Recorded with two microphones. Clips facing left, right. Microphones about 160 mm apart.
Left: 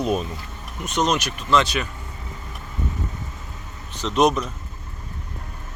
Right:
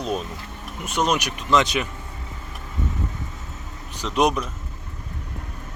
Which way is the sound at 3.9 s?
10° right (ahead or behind).